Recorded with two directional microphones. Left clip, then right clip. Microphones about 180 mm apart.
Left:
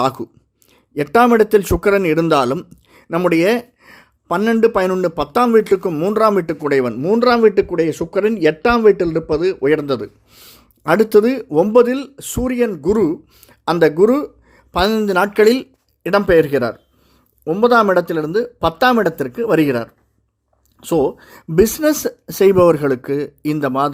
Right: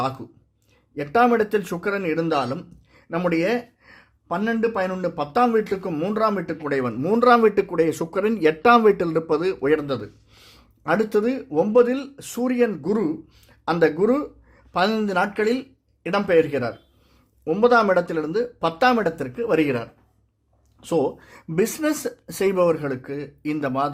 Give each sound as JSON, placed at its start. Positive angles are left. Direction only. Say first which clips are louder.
{"t": 0.9, "sound": "speech", "louder": "left 6 dB", "side_deg": 40}
{"t": 6.9, "sound": "a man's voice", "louder": "right 2 dB", "side_deg": 20}
{"t": 9.6, "sound": "speech", "louder": "left 5 dB", "side_deg": 35}
{"t": 17.4, "sound": "speech", "louder": "left 4 dB", "side_deg": 25}